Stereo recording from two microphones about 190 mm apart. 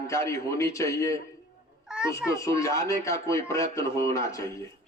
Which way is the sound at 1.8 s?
5° right (ahead or behind).